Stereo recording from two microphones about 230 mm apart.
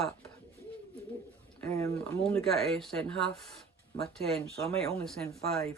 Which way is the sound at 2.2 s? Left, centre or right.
Centre.